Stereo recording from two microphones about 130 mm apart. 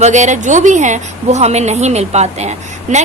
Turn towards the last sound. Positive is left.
turn(degrees=-60)  # may be behind; listen again after turning